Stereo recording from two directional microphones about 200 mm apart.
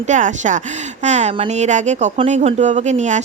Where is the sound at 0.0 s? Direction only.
40° right (ahead or behind).